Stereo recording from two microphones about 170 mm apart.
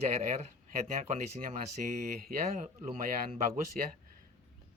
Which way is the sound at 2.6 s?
40° right (ahead or behind).